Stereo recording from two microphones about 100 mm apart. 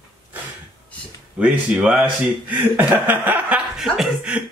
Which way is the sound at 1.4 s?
15° right (ahead or behind).